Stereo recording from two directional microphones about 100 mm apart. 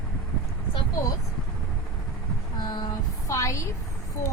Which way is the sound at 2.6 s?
45° left (ahead or behind).